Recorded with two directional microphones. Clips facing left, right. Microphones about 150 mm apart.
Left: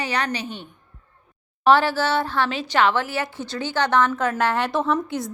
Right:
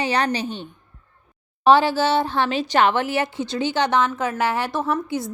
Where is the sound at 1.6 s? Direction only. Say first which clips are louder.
Right 2 dB; 15° right (ahead or behind).